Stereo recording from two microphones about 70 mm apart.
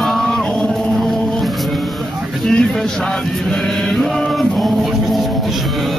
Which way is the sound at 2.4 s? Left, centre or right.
Centre.